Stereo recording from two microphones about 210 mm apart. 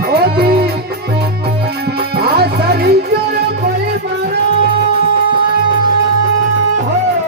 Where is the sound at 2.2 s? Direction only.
50° right (ahead or behind).